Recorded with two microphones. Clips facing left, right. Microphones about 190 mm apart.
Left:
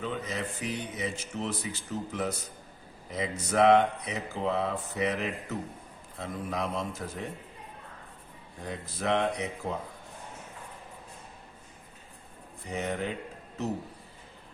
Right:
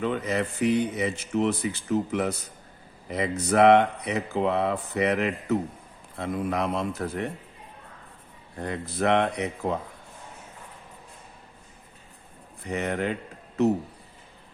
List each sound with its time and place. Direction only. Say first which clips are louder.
0.0 s speech: right 7 dB; 70° right (ahead or behind)
8.6 s speech: right 6 dB; 65° right (ahead or behind)
12.6 s speech: right 5 dB; 70° right (ahead or behind)